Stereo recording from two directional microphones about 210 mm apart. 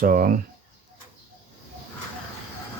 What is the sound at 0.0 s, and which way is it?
Speech, 40° right (ahead or behind).